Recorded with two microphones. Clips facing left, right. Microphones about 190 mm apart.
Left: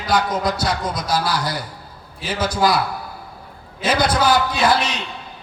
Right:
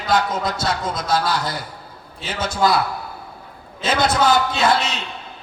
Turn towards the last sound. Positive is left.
turn(degrees=-25)  # may be behind; listen again after turning